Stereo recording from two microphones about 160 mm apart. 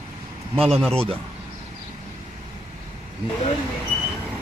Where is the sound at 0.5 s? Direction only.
35° right (ahead or behind).